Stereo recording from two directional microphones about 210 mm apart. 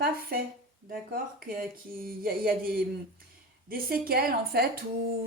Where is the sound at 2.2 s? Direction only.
45° right (ahead or behind).